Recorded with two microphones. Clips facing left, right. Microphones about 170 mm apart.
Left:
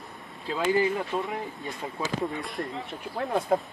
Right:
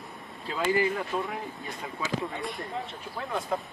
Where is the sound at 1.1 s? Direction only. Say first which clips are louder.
Left 1 dB; 25° left (ahead or behind).